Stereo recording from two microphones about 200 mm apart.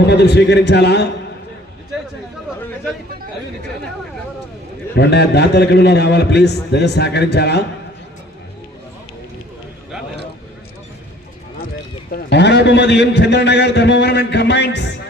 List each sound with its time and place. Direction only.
0.1 s a man's voice: 55° left (ahead or behind)
4.9 s a man's voice: 55° left (ahead or behind)
12.1 s a man's voice: 60° left (ahead or behind)